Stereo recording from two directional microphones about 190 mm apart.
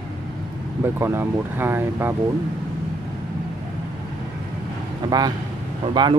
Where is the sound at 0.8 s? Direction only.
10° right (ahead or behind).